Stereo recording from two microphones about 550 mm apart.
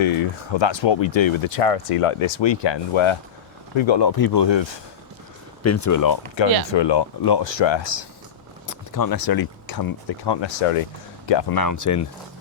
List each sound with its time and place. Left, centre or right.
0.0 s speech: left
5.6 s speech: left
6.3 s speech: left
8.6 s a sound: left
10.2 s speech: left